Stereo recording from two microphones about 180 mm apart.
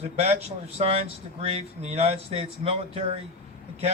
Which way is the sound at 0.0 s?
35° right (ahead or behind).